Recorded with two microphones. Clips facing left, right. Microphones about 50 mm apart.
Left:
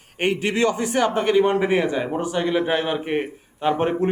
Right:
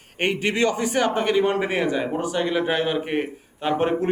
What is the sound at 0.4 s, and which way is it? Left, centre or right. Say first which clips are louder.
Speech: even; right.